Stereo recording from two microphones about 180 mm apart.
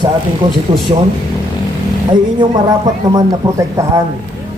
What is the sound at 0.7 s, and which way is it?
Speech, 30° right (ahead or behind).